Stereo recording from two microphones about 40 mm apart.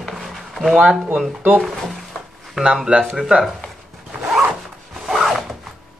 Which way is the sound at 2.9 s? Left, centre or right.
Right.